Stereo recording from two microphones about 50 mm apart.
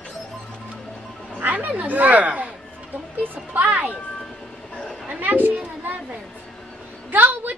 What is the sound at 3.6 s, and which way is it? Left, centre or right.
Speech, right.